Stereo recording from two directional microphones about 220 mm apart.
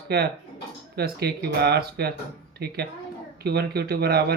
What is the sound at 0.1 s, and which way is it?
A man's voice, 45° right (ahead or behind).